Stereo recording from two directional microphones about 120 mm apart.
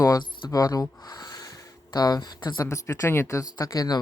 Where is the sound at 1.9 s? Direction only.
35° left (ahead or behind).